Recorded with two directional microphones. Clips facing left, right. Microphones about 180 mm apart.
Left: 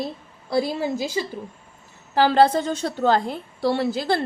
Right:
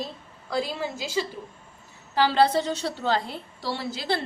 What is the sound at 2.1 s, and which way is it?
A woman's voice, 50° left (ahead or behind).